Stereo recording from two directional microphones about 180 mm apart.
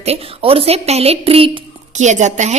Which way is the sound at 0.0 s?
35° right (ahead or behind).